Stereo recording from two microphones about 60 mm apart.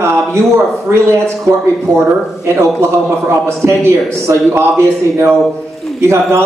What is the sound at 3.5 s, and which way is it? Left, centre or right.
Speech, right.